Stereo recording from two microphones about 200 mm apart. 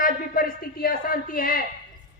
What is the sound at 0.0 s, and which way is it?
A woman's voice, 45° left (ahead or behind).